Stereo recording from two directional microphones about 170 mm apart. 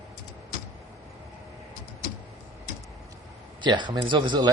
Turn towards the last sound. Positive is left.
turn(degrees=-25)  # may be behind; listen again after turning